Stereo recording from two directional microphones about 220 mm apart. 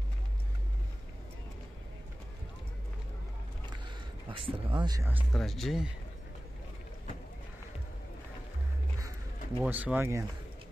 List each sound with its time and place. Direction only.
4.3 s speech: 25° right (ahead or behind)
5.3 s speech: centre (ahead or behind)
9.6 s speech: 5° right (ahead or behind)